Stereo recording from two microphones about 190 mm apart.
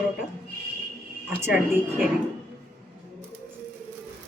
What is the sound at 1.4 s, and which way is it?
Speech, 10° right (ahead or behind).